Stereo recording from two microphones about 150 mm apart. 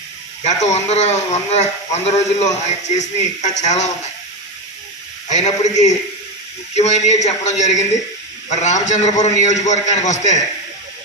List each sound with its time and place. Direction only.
0.4 s speech: 50° left (ahead or behind)
5.3 s speech: 50° left (ahead or behind)